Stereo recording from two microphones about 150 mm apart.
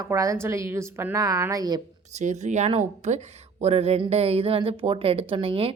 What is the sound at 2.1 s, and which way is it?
Speech, 50° right (ahead or behind).